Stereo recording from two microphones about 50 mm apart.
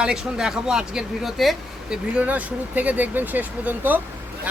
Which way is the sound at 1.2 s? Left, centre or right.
Centre.